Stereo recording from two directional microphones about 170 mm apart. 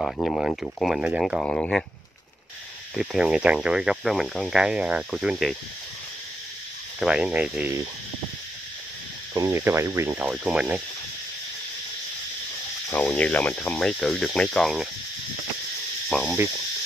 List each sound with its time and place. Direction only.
0.0 s speech: centre (ahead or behind)
3.0 s speech: centre (ahead or behind)
7.0 s speech: 5° right (ahead or behind)
9.3 s speech: 20° right (ahead or behind)
10.2 s speech: 5° right (ahead or behind)
12.9 s speech: 10° left (ahead or behind)
16.1 s cricket: centre (ahead or behind)